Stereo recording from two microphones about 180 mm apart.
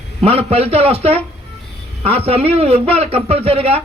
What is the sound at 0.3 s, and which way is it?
Speech, 35° right (ahead or behind).